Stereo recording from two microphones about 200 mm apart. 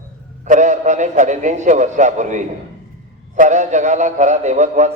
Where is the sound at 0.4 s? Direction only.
40° right (ahead or behind).